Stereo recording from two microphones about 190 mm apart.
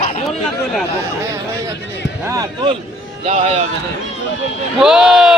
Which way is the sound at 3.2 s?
35° right (ahead or behind).